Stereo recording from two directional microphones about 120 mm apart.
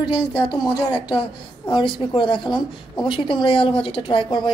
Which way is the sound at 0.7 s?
35° left (ahead or behind).